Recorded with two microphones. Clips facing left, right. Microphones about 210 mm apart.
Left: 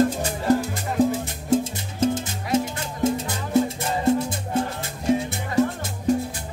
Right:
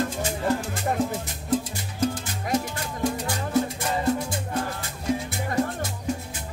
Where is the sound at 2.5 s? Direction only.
25° left (ahead or behind).